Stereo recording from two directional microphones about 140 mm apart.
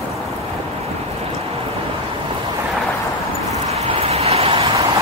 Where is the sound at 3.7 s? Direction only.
45° right (ahead or behind).